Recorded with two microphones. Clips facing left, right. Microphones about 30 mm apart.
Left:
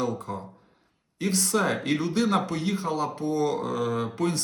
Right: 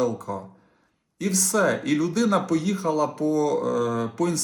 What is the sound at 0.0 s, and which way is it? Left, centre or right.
Speech, left.